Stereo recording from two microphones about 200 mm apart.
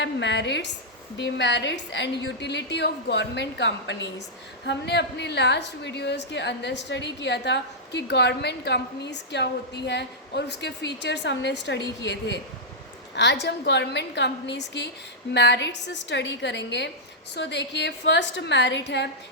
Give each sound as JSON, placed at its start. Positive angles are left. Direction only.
{"t": 0.0, "sound": "a woman's voice", "side_deg": 60}